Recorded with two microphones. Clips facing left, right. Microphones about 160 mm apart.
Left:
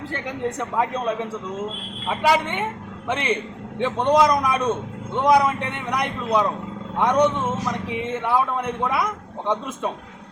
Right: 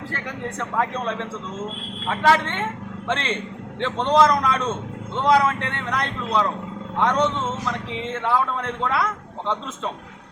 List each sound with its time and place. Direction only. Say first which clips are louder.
0.1 s a man's voice: left 6 dB; 20° left (ahead or behind)